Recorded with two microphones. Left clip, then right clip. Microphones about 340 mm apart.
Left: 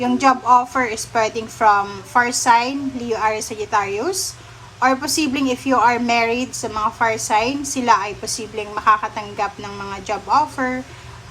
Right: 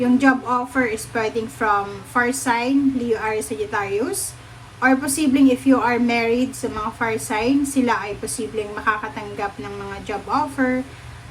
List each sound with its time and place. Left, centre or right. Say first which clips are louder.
0.0 s a woman's voice: left 2 dB; centre